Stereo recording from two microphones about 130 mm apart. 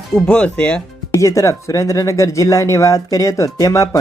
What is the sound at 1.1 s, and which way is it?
Speech, 25° left (ahead or behind).